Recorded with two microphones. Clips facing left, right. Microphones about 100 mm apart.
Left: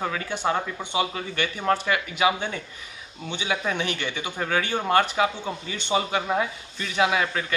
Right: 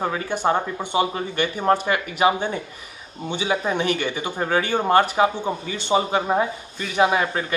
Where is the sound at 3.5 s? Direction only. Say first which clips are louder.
Right 4 dB; 30° right (ahead or behind).